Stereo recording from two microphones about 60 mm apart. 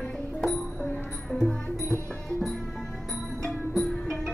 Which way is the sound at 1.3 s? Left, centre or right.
Centre.